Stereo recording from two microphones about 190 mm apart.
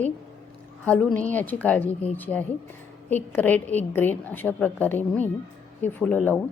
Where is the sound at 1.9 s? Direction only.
30° left (ahead or behind).